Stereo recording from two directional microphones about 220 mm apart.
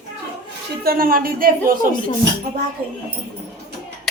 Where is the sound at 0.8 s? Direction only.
40° right (ahead or behind).